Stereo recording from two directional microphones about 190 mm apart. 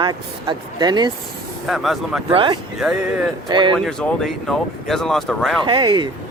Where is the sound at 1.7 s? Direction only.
Centre (ahead or behind).